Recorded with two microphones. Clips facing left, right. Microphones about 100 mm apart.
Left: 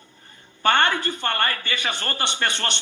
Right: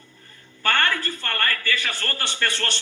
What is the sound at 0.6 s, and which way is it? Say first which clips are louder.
A man's voice: left 3 dB; 20° left (ahead or behind).